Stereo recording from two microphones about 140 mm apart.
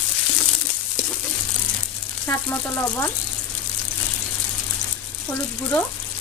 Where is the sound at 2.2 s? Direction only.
15° left (ahead or behind).